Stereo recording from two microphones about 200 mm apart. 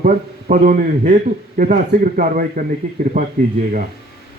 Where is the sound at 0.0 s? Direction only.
45° right (ahead or behind).